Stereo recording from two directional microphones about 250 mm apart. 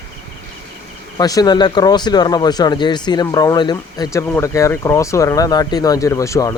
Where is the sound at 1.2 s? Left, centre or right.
Centre.